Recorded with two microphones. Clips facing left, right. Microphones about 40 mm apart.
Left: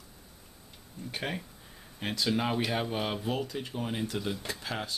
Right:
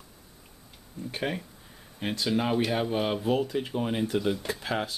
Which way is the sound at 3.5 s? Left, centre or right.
Right.